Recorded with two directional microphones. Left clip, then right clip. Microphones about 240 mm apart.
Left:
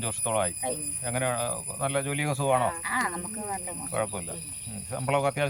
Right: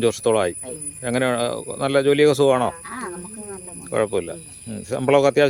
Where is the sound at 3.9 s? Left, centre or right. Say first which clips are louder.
Right 10 dB; right.